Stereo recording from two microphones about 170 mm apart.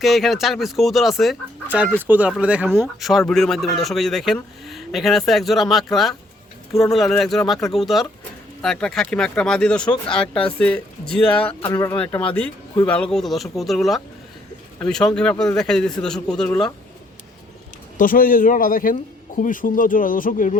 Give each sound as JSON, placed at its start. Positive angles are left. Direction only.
{"t": 0.0, "sound": "a man's voice", "side_deg": 0}
{"t": 17.9, "sound": "speech", "side_deg": 55}